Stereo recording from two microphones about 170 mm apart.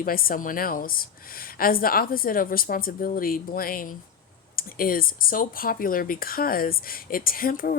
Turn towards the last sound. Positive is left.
turn(degrees=55)  # may be behind; listen again after turning